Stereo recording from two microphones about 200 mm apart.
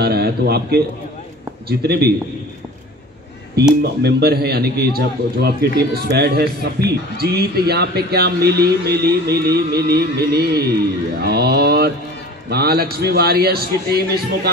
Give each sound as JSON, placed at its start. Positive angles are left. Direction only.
{"t": 0.0, "sound": "a man's voice", "side_deg": -50}
{"t": 3.8, "sound": "a man's voice", "side_deg": -50}